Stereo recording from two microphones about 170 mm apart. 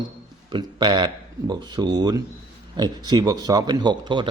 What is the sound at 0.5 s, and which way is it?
A man's voice, 25° right (ahead or behind).